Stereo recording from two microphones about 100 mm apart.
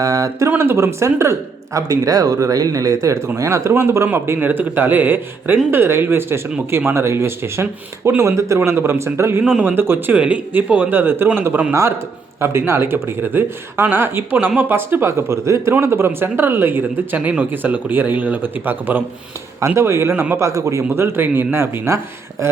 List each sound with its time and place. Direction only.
0.0 s a man's voice: 35° right (ahead or behind)
9.4 s speech: 5° right (ahead or behind)
9.6 s a man's voice: 20° right (ahead or behind)